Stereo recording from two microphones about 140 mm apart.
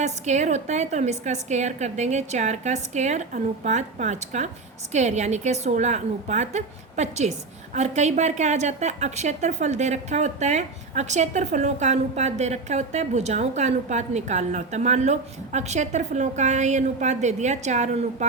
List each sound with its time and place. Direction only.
0.0 s a woman's voice: 55° right (ahead or behind)